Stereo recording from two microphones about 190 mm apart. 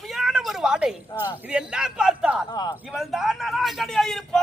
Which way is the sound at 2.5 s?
20° left (ahead or behind).